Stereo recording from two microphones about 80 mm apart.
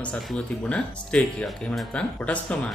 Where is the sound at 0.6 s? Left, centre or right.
Centre.